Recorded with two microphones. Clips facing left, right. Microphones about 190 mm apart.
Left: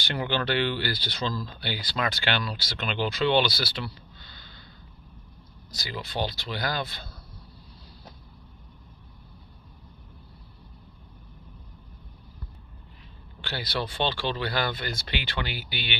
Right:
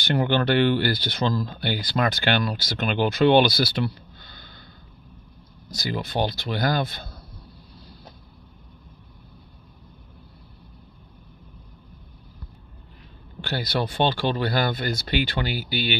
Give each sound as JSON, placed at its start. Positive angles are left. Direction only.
{"t": 0.0, "sound": "speech", "side_deg": -50}
{"t": 5.7, "sound": "speech", "side_deg": -50}
{"t": 13.4, "sound": "speech", "side_deg": -45}